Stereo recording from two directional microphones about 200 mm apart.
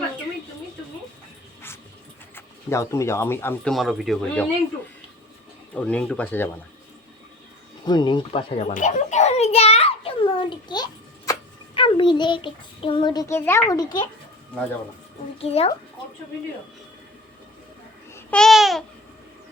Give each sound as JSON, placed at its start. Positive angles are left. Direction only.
{"t": 2.3, "sound": "speech", "side_deg": 15}
{"t": 5.7, "sound": "speech", "side_deg": 5}
{"t": 7.9, "sound": "a child's voice", "side_deg": 20}
{"t": 15.4, "sound": "speech", "side_deg": 30}
{"t": 18.1, "sound": "babbling", "side_deg": 5}